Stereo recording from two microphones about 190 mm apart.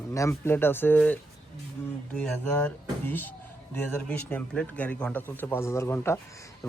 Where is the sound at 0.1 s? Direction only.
15° left (ahead or behind).